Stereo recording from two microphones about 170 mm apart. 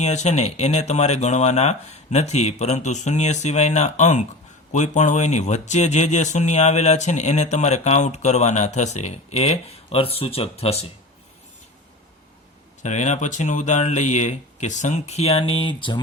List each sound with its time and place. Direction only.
0.0 s speech: 40° left (ahead or behind)
12.8 s speech: 45° left (ahead or behind)